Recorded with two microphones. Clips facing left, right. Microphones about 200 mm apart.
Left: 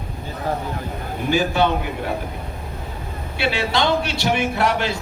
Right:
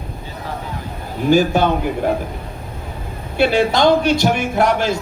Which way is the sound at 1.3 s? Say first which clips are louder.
Right 6 dB; 45° right (ahead or behind).